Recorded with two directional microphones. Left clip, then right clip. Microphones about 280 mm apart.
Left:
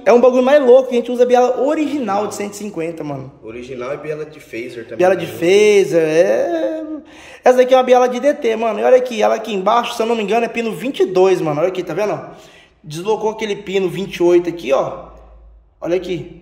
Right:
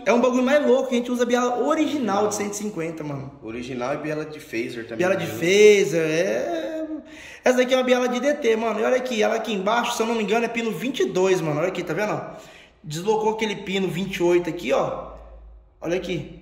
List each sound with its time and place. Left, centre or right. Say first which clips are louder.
0.0 s a man's voice: left 9 dB; centre
3.5 s a man's voice: left 2 dB; centre
4.9 s a man's voice: left 8 dB; centre